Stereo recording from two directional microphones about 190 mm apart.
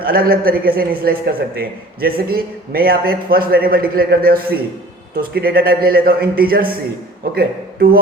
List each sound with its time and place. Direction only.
0.0 s a man's voice: 50° right (ahead or behind)